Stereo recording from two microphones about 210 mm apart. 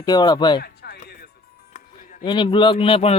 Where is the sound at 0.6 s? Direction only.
50° left (ahead or behind).